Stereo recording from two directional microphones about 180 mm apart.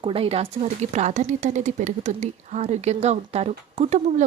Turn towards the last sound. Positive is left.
turn(degrees=-40)  # may be behind; listen again after turning